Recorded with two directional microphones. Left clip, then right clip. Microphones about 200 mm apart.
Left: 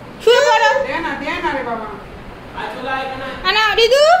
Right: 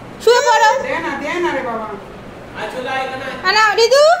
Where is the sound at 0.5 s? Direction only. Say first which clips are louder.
Right 1 dB; 20° right (ahead or behind).